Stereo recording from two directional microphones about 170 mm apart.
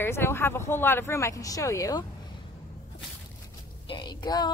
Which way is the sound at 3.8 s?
25° left (ahead or behind).